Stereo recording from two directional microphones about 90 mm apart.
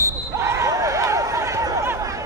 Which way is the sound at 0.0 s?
35° right (ahead or behind).